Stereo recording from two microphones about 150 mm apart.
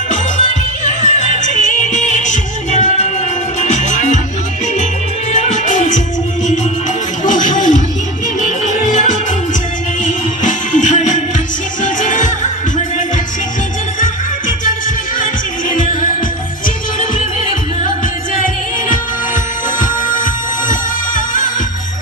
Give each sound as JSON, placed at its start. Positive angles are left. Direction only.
{"t": 1.0, "sound": "music", "side_deg": 55}
{"t": 5.3, "sound": "music", "side_deg": 55}
{"t": 7.3, "sound": "music", "side_deg": 55}
{"t": 14.0, "sound": "music", "side_deg": 60}
{"t": 19.8, "sound": "music", "side_deg": 65}